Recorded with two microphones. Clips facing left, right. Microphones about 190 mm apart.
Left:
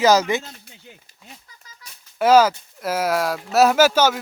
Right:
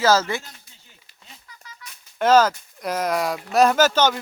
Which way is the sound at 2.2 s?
10° left (ahead or behind).